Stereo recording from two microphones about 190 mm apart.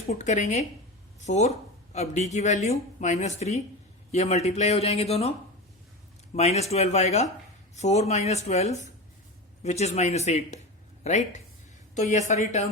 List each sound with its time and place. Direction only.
0.1 s speech: 40° left (ahead or behind)
6.3 s speech: 35° left (ahead or behind)